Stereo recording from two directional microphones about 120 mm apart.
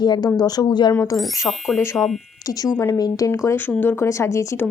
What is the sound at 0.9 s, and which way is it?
A woman's voice, 25° left (ahead or behind).